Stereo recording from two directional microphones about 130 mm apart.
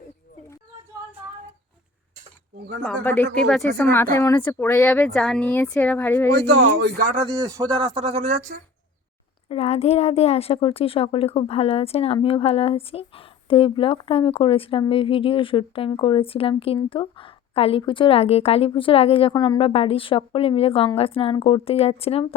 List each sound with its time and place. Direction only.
2.8 s speech: 10° left (ahead or behind)
3.8 s speech: 15° left (ahead or behind)
7.4 s speech: 25° right (ahead or behind)
7.8 s speech: 40° right (ahead or behind); by 8.5 s 60° right (ahead or behind)
9.5 s a woman's voice: 50° left (ahead or behind)